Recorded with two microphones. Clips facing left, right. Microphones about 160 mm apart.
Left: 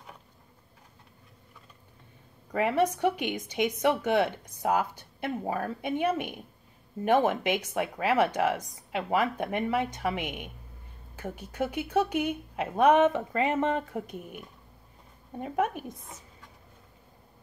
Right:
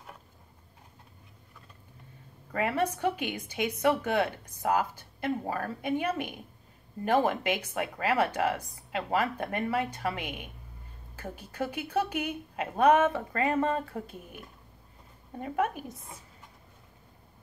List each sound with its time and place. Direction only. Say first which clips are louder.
2.5 s speech: left 3 dB; 20° left (ahead or behind)